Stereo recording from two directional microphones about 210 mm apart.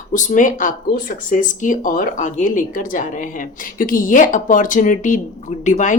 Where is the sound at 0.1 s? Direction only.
40° left (ahead or behind).